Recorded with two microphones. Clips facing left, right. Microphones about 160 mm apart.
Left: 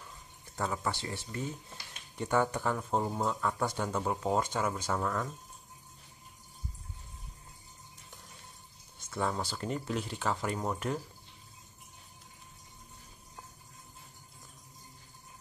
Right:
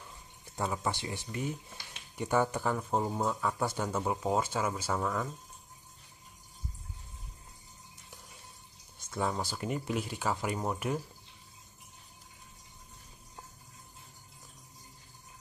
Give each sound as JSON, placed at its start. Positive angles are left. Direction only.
{"t": 0.6, "sound": "speech", "side_deg": -15}
{"t": 9.1, "sound": "speech", "side_deg": -10}